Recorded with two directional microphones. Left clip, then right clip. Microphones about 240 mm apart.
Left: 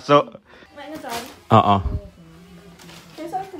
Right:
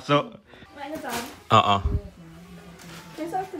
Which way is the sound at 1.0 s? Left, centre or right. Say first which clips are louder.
Left 5 dB; left.